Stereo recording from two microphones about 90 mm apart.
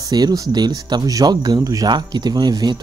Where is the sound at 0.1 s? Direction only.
45° right (ahead or behind).